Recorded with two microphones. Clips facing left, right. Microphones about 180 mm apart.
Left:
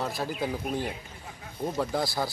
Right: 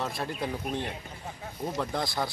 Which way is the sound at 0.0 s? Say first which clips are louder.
Left 2 dB; centre (ahead or behind).